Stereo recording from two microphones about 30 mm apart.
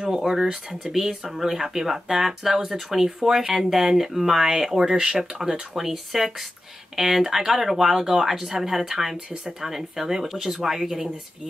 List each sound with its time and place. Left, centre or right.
0.3 s speech: centre
5.4 s speech: centre